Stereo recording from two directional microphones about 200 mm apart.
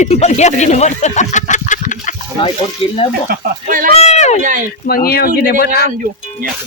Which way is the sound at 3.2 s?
45° right (ahead or behind).